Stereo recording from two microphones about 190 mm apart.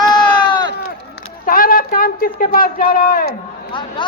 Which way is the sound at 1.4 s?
50° left (ahead or behind).